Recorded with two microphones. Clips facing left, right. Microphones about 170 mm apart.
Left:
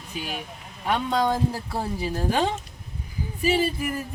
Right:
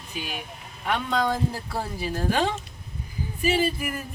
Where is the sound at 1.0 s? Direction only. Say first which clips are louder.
Left 2 dB; 20° left (ahead or behind).